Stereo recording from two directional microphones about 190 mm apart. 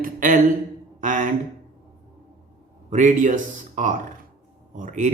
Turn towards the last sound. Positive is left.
turn(degrees=-40)  # may be behind; listen again after turning